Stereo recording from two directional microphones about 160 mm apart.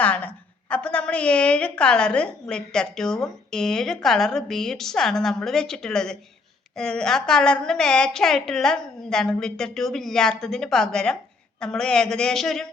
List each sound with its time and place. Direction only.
0.0 s a woman's voice: 10° left (ahead or behind)